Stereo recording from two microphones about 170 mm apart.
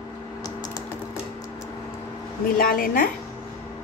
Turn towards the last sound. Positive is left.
turn(degrees=60)  # may be behind; listen again after turning